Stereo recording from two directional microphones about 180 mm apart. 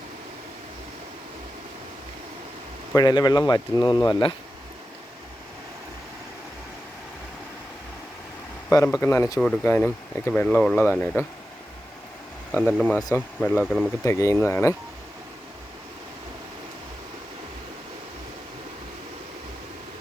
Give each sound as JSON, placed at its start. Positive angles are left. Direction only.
{"t": 2.9, "sound": "speech", "side_deg": 25}
{"t": 8.7, "sound": "speech", "side_deg": 15}
{"t": 12.6, "sound": "speech", "side_deg": 5}
{"t": 13.0, "sound": "speech", "side_deg": 20}
{"t": 13.7, "sound": "speech", "side_deg": 0}
{"t": 14.0, "sound": "speech", "side_deg": 15}